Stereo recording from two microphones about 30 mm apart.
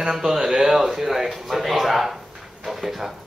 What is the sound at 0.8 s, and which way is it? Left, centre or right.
Speech, centre.